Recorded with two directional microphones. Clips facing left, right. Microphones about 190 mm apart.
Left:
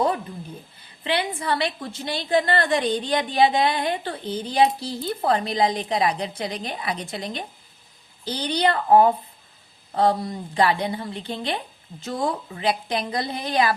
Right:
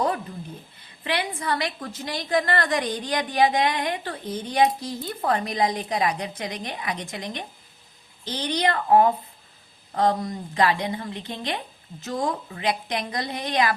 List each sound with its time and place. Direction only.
0.9 s a woman's voice: 30° left (ahead or behind)